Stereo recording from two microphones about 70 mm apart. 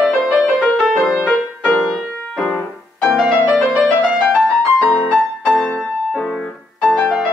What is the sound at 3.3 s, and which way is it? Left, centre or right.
Music, centre.